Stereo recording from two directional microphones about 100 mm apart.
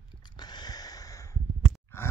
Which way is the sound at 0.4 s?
45° left (ahead or behind).